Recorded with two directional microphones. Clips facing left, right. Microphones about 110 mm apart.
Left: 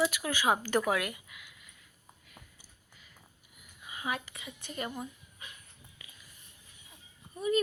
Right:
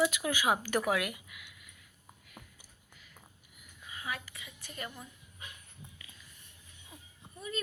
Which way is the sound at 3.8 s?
15° left (ahead or behind).